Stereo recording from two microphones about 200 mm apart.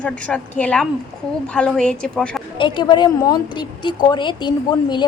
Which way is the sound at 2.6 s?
20° left (ahead or behind).